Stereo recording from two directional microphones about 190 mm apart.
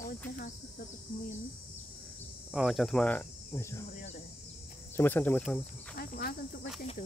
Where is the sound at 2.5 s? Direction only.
Centre (ahead or behind).